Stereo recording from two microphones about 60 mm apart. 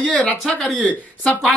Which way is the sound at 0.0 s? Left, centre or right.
Centre.